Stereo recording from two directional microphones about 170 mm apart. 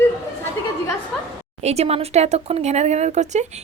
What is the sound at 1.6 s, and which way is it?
A woman's voice, 40° right (ahead or behind).